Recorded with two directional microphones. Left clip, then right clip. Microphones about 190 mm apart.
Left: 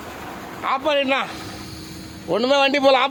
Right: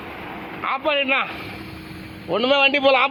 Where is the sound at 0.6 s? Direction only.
25° left (ahead or behind).